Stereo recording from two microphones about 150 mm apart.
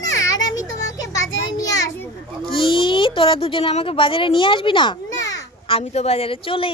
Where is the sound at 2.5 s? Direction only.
35° left (ahead or behind).